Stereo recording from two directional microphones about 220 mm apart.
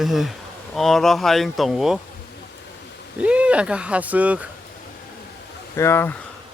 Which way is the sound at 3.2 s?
5° right (ahead or behind).